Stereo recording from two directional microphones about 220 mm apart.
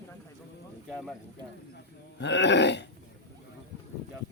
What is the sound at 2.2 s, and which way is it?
Speech, 50° left (ahead or behind).